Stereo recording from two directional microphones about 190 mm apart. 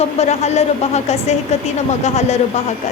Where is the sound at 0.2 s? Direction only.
35° left (ahead or behind).